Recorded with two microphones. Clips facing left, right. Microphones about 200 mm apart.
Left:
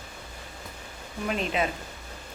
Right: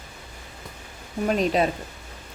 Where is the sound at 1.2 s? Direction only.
40° right (ahead or behind).